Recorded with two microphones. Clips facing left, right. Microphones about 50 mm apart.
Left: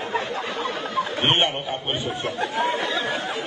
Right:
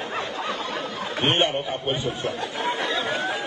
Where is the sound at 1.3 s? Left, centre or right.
Left.